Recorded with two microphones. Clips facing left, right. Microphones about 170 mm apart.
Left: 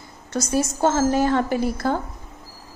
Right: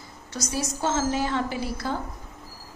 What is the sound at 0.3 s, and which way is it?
A woman's voice, 50° left (ahead or behind).